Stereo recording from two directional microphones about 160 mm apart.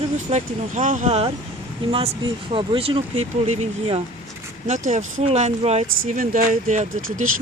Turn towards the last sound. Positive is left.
turn(degrees=-50)  # may be behind; listen again after turning